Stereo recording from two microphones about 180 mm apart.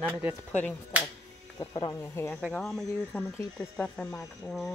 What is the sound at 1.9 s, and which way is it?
Speech, 15° left (ahead or behind).